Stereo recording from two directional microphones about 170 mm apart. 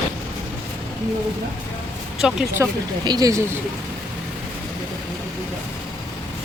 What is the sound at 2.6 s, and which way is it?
Speech, 15° right (ahead or behind).